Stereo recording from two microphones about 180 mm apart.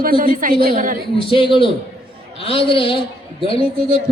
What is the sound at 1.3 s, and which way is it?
A woman's voice, 30° left (ahead or behind).